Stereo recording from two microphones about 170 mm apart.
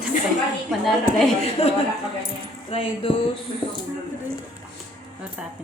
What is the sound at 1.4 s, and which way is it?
Speech, 35° left (ahead or behind).